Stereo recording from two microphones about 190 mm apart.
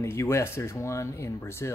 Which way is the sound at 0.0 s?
15° left (ahead or behind).